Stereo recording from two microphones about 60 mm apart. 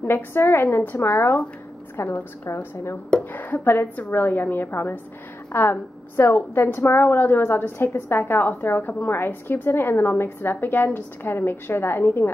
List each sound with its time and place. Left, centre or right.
0.0 s a woman's voice: left
3.3 s a woman's voice: left